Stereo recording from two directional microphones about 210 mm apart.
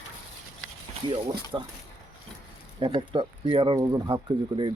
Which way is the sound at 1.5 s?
15° right (ahead or behind).